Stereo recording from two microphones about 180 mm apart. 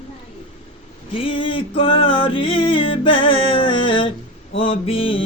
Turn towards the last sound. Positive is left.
turn(degrees=30)  # may be behind; listen again after turning